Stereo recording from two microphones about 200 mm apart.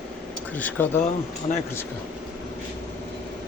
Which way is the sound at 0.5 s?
10° left (ahead or behind).